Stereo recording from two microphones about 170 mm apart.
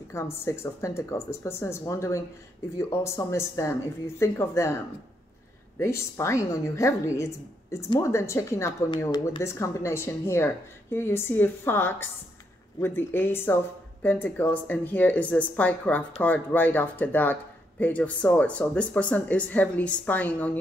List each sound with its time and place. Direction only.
0.1 s speech: 15° left (ahead or behind)
5.8 s speech: 15° left (ahead or behind)